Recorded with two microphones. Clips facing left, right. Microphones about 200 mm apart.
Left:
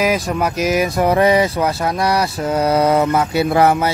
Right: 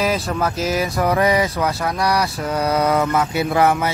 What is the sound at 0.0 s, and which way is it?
Speech, 15° left (ahead or behind).